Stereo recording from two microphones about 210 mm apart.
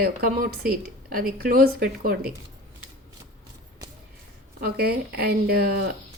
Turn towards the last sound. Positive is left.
turn(degrees=-45)  # may be behind; listen again after turning